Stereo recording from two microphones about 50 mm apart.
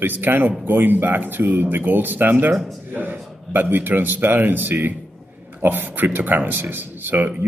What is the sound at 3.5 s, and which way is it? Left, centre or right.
A man's voice, right.